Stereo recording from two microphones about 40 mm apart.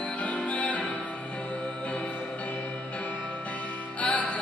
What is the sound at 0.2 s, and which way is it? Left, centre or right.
Music, left.